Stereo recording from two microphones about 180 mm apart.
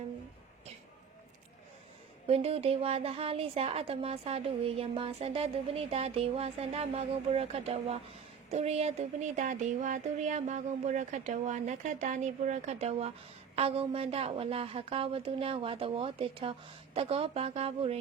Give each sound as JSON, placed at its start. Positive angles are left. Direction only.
{"t": 2.2, "sound": "a woman's voice", "side_deg": -35}